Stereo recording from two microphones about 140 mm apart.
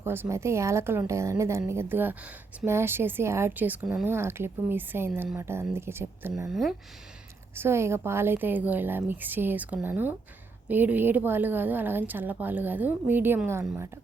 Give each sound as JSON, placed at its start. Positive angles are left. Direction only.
{"t": 0.0, "sound": "a woman's voice", "side_deg": -15}
{"t": 6.5, "sound": "speech", "side_deg": 0}
{"t": 7.5, "sound": "a woman's voice", "side_deg": -15}